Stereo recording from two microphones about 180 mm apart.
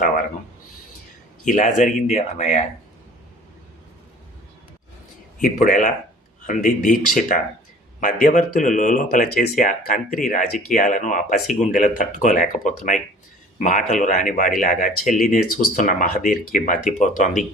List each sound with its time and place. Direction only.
1.5 s speech: 45° left (ahead or behind)
5.4 s speech: 50° left (ahead or behind)